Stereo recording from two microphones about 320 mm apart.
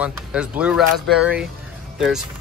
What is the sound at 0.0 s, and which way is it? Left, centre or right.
Speech, centre.